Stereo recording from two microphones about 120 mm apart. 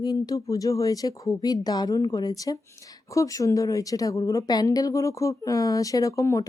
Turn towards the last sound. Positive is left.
turn(degrees=25)  # may be behind; listen again after turning